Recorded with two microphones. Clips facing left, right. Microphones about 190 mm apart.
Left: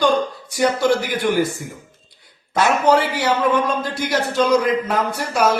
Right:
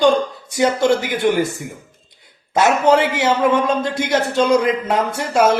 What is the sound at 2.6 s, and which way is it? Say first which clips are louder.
A man's voice: right 2 dB; 20° right (ahead or behind).